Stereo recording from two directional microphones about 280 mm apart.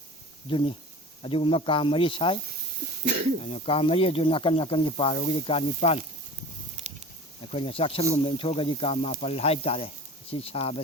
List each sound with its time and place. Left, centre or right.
0.5 s speech: centre
3.4 s speech: centre
7.5 s speech: centre